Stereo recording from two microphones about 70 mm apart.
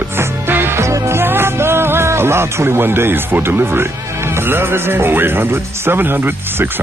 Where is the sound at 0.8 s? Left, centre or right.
Right.